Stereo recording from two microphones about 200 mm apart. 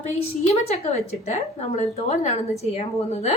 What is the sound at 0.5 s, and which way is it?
A woman's voice, 30° left (ahead or behind).